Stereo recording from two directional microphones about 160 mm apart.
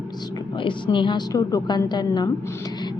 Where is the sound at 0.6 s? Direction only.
30° left (ahead or behind).